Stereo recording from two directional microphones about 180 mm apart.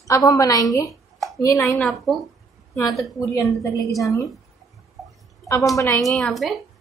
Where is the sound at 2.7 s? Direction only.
20° left (ahead or behind).